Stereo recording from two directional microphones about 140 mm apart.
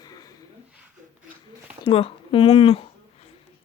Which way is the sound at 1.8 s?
40° left (ahead or behind).